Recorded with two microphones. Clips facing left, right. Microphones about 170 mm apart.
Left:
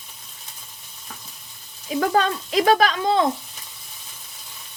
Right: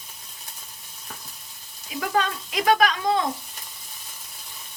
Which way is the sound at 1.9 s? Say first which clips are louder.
Left 5 dB; 35° left (ahead or behind).